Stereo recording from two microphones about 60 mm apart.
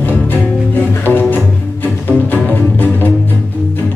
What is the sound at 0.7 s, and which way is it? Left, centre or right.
Music, left.